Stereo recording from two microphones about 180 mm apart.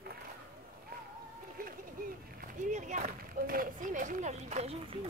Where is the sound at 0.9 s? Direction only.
60° right (ahead or behind).